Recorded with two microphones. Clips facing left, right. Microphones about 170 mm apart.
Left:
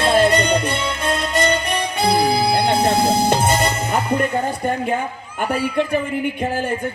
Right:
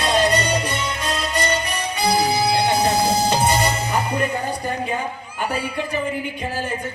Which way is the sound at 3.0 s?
55° left (ahead or behind).